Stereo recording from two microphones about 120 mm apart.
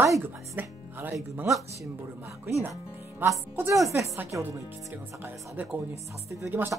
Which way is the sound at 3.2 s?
20° right (ahead or behind).